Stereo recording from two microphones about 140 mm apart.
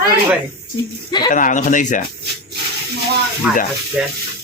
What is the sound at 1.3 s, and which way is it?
Speech, 65° left (ahead or behind).